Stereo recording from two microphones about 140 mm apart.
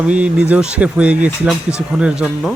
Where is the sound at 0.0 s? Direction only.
10° right (ahead or behind).